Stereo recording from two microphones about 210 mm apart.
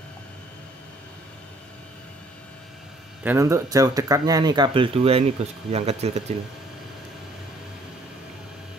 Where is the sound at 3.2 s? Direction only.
15° right (ahead or behind); by 6.2 s 30° right (ahead or behind).